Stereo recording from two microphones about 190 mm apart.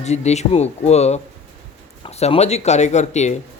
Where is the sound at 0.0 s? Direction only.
35° left (ahead or behind).